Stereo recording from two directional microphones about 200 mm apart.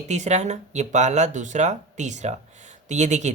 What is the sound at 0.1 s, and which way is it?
Speech, 35° right (ahead or behind).